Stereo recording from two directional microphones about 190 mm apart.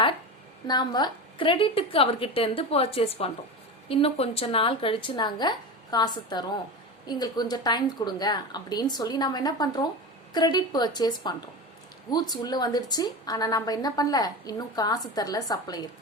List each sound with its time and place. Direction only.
0.7 s a woman's voice: 20° left (ahead or behind)